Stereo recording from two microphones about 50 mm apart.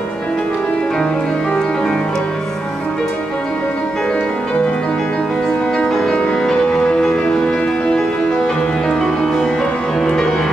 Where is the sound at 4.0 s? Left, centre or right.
Centre.